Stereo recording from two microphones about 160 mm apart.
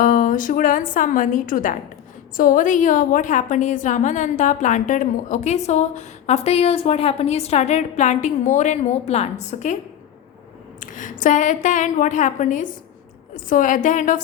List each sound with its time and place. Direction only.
0.0 s a woman's voice: 50° left (ahead or behind)
10.8 s a woman's voice: 55° left (ahead or behind)